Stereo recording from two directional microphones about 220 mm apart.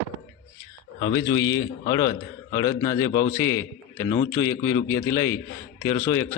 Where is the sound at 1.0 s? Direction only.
15° left (ahead or behind).